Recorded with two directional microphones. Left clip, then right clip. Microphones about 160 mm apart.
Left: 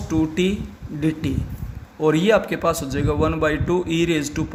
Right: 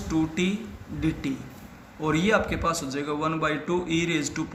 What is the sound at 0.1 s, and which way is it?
A man's voice, 60° left (ahead or behind).